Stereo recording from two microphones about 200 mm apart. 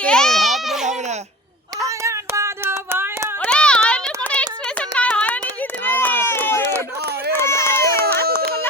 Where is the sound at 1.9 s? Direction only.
15° right (ahead or behind).